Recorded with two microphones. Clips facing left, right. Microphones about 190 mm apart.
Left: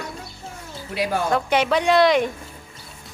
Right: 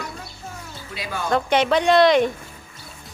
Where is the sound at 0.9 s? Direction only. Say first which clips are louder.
Left 8 dB; 70° left (ahead or behind).